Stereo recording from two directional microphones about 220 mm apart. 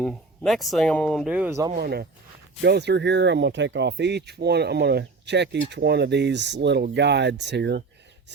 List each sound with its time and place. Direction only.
0.0 s speech: centre (ahead or behind)
1.7 s speech: 45° right (ahead or behind)